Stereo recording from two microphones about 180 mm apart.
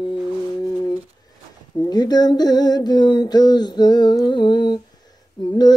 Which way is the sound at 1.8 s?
20° left (ahead or behind).